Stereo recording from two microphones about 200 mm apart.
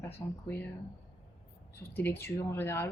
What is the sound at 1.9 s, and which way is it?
Speech, 10° left (ahead or behind).